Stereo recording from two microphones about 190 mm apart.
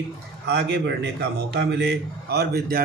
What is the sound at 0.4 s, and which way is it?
A man's voice, 65° right (ahead or behind).